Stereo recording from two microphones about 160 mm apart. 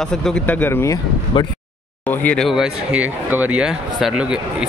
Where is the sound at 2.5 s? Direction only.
5° right (ahead or behind).